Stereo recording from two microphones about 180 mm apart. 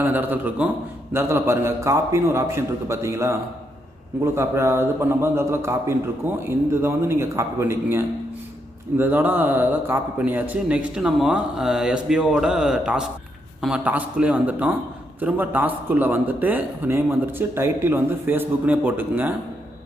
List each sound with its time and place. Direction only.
0.0 s speech: 10° right (ahead or behind)